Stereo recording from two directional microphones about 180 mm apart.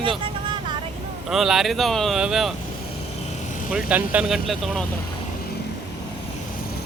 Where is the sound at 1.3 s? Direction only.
Centre (ahead or behind).